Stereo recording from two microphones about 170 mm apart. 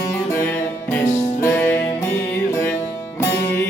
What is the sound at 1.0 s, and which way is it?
Music, 40° left (ahead or behind).